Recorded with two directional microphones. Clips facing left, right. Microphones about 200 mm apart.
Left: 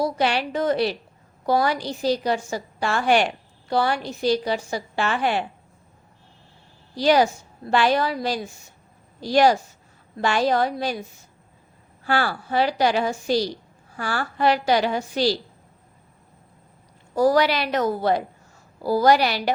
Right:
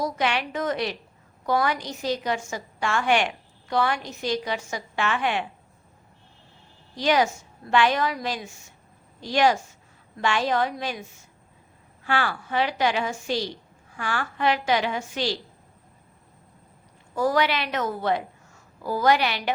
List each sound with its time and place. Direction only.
0.0 s a woman's voice: 35° left (ahead or behind)
6.9 s a woman's voice: 35° left (ahead or behind)
12.0 s a woman's voice: 40° left (ahead or behind)
17.2 s a woman's voice: 35° left (ahead or behind)